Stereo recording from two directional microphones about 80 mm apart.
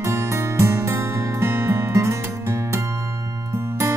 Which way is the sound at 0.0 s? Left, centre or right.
Right.